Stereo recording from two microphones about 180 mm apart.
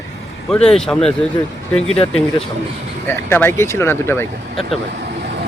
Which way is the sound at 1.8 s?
35° left (ahead or behind).